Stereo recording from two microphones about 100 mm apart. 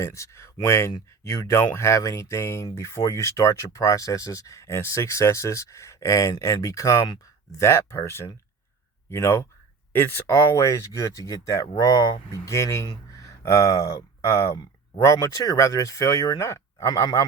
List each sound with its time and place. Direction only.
0.0 s speech: 30° left (ahead or behind)